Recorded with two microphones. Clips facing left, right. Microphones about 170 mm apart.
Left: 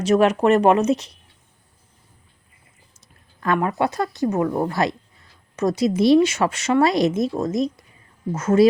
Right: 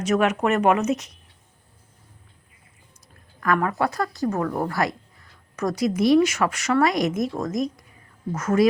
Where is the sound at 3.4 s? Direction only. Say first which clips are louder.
Left 2 dB; 25° left (ahead or behind).